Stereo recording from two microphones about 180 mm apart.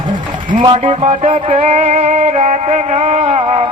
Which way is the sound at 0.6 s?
30° right (ahead or behind).